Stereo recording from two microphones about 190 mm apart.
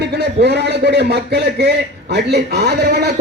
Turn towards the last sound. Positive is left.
turn(degrees=-60)  # may be behind; listen again after turning